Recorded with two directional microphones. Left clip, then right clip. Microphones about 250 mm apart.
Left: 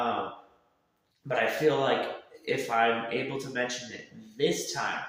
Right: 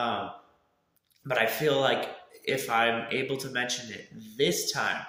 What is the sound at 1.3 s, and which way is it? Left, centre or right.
Speech, right.